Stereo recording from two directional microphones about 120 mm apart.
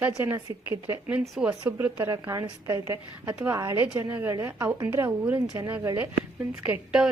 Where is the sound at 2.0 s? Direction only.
25° right (ahead or behind).